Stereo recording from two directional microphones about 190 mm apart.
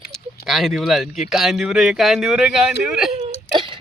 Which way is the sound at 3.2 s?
25° right (ahead or behind).